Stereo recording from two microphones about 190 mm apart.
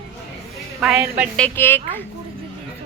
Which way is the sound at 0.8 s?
5° right (ahead or behind).